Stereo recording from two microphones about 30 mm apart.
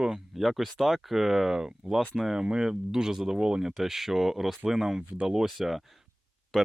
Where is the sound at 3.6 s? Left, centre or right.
Centre.